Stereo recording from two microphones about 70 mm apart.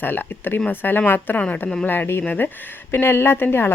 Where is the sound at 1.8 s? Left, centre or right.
Left.